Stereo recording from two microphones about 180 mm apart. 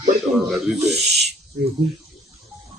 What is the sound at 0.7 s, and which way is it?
Owl, 35° right (ahead or behind).